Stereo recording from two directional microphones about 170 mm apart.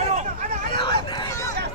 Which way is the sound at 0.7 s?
30° left (ahead or behind).